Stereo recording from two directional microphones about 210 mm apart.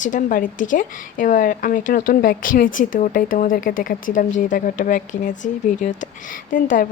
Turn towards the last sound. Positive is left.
turn(degrees=40)  # may be behind; listen again after turning